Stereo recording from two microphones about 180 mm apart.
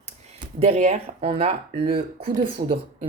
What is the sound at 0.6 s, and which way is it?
Speech, 35° right (ahead or behind).